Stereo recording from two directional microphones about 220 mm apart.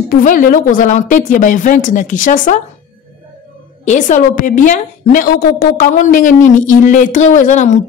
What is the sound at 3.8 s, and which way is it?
A woman's voice, 35° left (ahead or behind).